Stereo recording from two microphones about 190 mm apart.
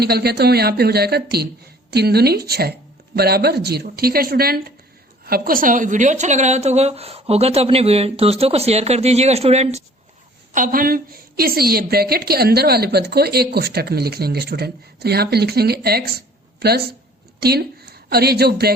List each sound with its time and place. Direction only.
0.0 s a woman's voice: 55° right (ahead or behind); by 9.8 s 35° right (ahead or behind)
10.5 s a woman's voice: 45° right (ahead or behind)